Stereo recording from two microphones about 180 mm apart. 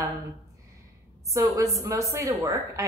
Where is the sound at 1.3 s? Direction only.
15° right (ahead or behind).